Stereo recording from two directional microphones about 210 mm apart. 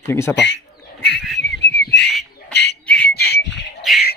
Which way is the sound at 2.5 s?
50° left (ahead or behind).